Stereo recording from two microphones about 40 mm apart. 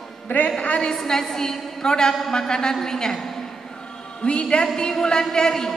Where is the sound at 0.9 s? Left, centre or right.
Centre.